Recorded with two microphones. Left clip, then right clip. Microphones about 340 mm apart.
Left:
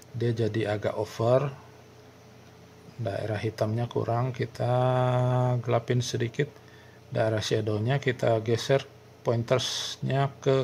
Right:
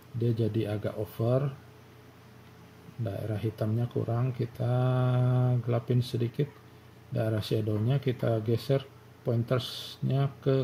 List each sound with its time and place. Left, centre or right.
0.2 s speech: left
3.1 s speech: left
7.5 s speech: left
7.9 s speech: left